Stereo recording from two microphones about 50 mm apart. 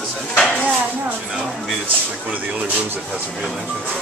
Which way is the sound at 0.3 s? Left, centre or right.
Left.